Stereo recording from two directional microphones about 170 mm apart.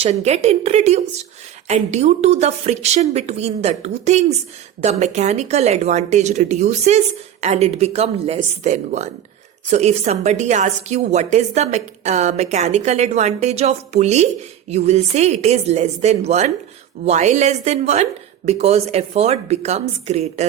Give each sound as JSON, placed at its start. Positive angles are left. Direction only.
{"t": 0.0, "sound": "a woman's voice", "side_deg": -40}